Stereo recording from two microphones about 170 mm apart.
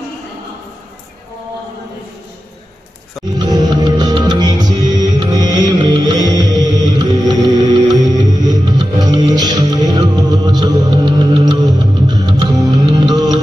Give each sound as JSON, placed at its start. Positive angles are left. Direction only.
{"t": 3.3, "sound": "music", "side_deg": -25}